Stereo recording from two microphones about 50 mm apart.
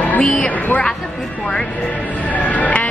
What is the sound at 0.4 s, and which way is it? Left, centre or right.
Speech, left.